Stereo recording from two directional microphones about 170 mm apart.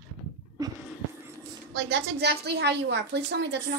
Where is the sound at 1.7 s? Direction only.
75° right (ahead or behind).